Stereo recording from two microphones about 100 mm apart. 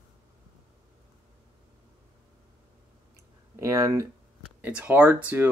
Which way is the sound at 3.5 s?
30° right (ahead or behind).